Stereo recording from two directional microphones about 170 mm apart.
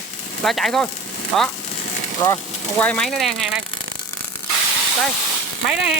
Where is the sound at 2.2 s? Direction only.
20° left (ahead or behind).